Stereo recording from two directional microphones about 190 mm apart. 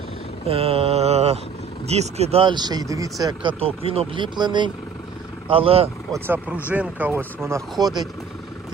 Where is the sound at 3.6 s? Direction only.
30° right (ahead or behind).